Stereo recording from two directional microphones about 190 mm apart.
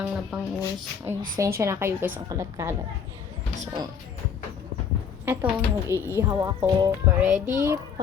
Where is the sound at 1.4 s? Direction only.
15° right (ahead or behind).